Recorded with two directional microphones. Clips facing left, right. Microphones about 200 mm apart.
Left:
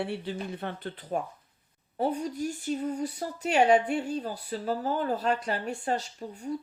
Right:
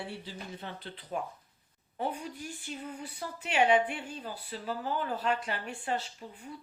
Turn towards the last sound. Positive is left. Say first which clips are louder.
# left 6 dB
turn(degrees=40)  # may be behind; listen again after turning